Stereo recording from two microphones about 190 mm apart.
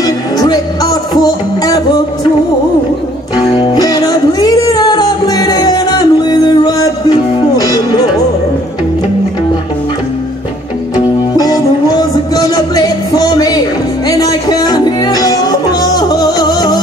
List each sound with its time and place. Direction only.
0.0 s music: 20° left (ahead or behind)
3.5 s music: 20° left (ahead or behind)
11.3 s music: 20° left (ahead or behind)